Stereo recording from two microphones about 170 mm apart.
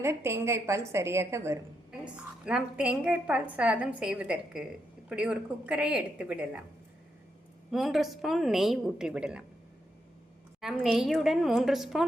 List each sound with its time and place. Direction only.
0.0 s a woman's voice: 15° right (ahead or behind)
2.1 s a woman's voice: 5° right (ahead or behind)
7.7 s a woman's voice: centre (ahead or behind)
10.6 s a woman's voice: 5° right (ahead or behind)